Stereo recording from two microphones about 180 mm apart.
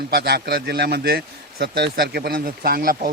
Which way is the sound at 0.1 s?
65° right (ahead or behind).